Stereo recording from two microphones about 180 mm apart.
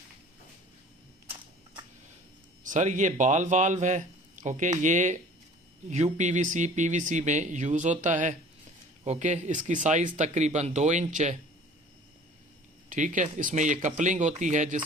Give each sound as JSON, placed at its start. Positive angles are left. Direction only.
{"t": 2.6, "sound": "speech", "side_deg": -45}
{"t": 12.9, "sound": "speech", "side_deg": -45}